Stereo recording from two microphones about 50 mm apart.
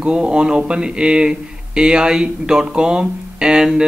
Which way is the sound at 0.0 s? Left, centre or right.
Right.